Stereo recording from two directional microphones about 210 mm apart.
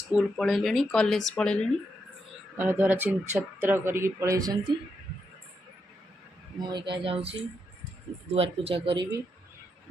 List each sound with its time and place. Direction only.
0.1 s speech: centre (ahead or behind)
2.6 s speech: 10° right (ahead or behind)
6.6 s speech: 20° right (ahead or behind)